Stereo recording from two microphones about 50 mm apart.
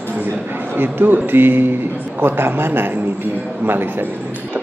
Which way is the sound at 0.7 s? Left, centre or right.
Right.